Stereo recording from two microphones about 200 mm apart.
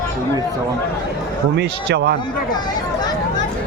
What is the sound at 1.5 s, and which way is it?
Speech, 55° right (ahead or behind).